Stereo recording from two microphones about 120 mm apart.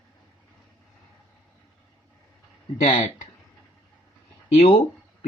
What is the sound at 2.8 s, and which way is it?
Speech, 75° left (ahead or behind).